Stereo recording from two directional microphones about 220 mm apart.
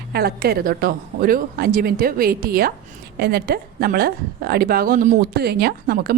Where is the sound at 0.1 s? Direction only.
45° right (ahead or behind).